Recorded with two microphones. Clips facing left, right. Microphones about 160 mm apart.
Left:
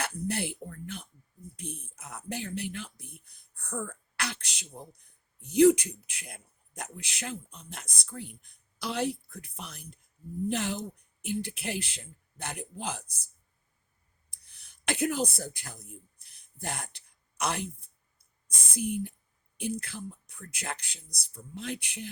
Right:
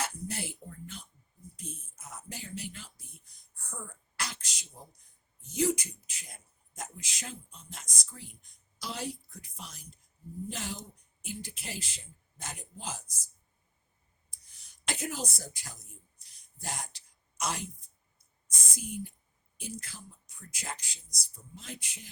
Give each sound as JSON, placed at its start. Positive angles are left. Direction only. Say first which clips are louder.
{"t": 0.0, "sound": "speech", "louder": "left 5 dB", "side_deg": 60}
{"t": 14.3, "sound": "a sound", "louder": "left 2 dB", "side_deg": 60}
{"t": 18.4, "sound": "speech", "louder": "left 10 dB", "side_deg": 60}